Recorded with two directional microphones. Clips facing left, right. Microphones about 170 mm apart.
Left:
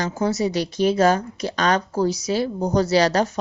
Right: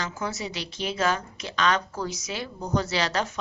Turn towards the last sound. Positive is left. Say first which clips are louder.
# left 9 dB
turn(degrees=40)  # may be behind; listen again after turning